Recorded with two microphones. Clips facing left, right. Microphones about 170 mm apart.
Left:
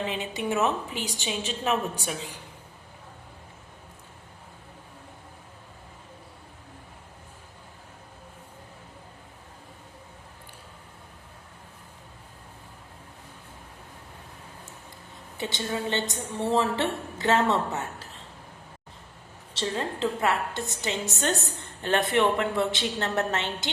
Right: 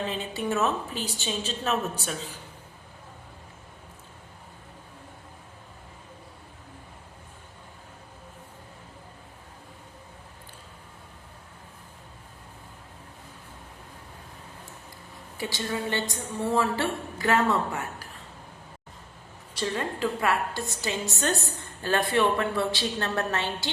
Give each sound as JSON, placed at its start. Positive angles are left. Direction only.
{"t": 0.0, "sound": "a woman's voice", "side_deg": 15}
{"t": 15.4, "sound": "a woman's voice", "side_deg": 20}
{"t": 19.5, "sound": "a woman's voice", "side_deg": 25}